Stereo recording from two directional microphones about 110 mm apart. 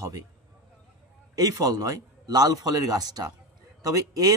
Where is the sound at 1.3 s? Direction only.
35° right (ahead or behind).